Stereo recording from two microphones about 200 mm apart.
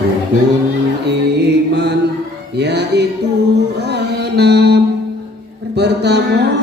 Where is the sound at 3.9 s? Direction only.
55° right (ahead or behind).